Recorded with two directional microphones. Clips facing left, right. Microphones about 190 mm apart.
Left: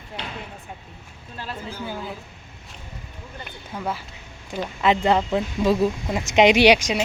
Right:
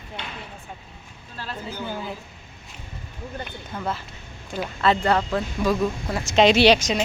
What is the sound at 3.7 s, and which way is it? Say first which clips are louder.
A man's voice: left 1 dB; 10° left (ahead or behind).